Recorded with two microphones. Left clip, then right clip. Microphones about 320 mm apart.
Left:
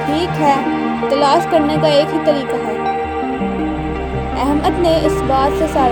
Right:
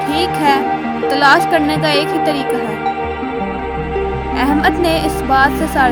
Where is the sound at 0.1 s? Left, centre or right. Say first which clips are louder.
Right 1 dB; right.